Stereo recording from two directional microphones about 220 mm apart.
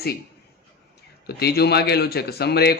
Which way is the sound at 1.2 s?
45° left (ahead or behind).